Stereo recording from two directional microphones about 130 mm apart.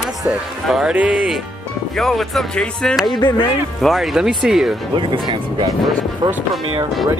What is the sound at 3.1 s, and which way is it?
Speech, 35° left (ahead or behind).